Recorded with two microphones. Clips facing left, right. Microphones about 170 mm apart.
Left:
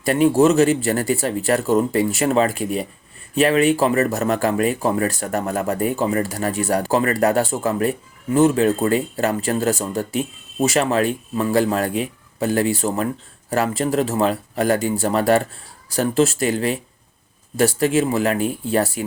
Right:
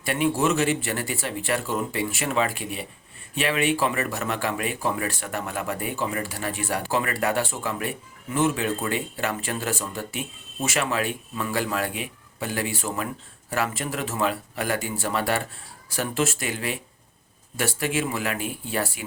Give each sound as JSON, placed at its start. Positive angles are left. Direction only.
{"t": 0.0, "sound": "speech", "side_deg": 40}